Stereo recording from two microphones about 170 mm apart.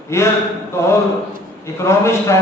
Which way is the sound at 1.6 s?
15° left (ahead or behind).